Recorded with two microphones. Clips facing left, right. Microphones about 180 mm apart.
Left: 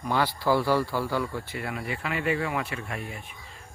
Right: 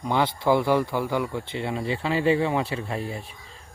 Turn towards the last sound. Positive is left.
turn(degrees=-30)  # may be behind; listen again after turning